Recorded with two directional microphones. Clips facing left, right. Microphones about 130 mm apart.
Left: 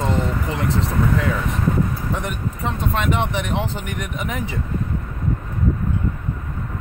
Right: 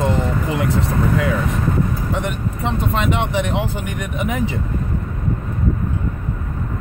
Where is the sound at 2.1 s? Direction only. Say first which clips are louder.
Right 3 dB; 20° right (ahead or behind).